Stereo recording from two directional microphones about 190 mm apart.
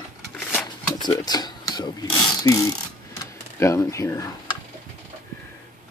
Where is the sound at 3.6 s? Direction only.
15° left (ahead or behind).